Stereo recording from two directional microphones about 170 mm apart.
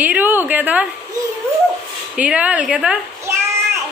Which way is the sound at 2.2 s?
10° right (ahead or behind).